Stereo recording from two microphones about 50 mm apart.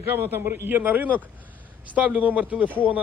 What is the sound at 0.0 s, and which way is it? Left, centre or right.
A man's voice, right.